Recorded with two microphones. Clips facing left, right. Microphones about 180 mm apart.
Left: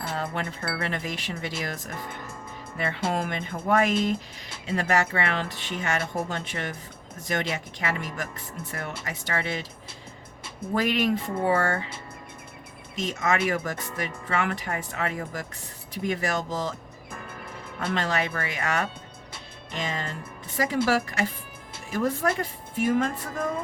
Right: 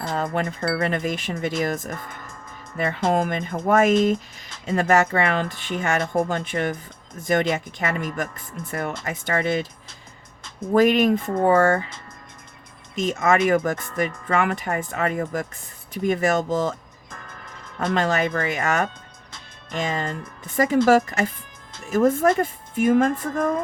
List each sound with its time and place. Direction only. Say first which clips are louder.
0.1 s wind chime: right 7 dB; 45° right (ahead or behind)
0.7 s speech: right 8 dB; 50° right (ahead or behind)
10.8 s speech: right 8 dB; 45° right (ahead or behind)
13.0 s speech: right 6 dB; 50° right (ahead or behind)
17.7 s speech: right 5 dB; 50° right (ahead or behind)